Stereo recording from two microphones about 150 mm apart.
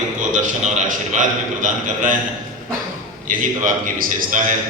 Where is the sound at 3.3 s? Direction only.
60° right (ahead or behind).